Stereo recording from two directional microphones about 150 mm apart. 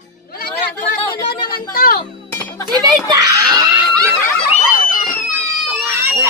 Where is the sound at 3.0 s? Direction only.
25° right (ahead or behind).